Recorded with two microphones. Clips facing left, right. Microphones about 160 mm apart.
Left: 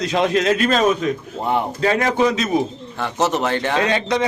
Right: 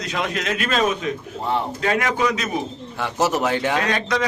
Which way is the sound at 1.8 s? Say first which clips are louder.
Left 5 dB; 35° left (ahead or behind).